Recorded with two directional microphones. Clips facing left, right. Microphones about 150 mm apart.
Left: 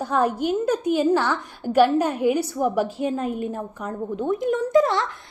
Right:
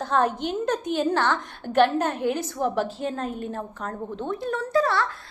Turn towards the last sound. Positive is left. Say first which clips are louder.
# left 4 dB
turn(degrees=20)  # may be behind; listen again after turning